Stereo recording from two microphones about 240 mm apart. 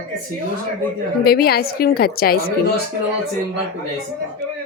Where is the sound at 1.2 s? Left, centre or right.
Left.